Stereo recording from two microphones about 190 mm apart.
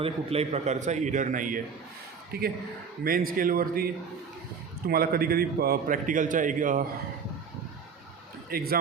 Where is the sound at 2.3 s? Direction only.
55° right (ahead or behind).